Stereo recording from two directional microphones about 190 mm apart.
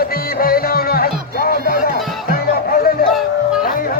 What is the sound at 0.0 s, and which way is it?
Music, 50° left (ahead or behind).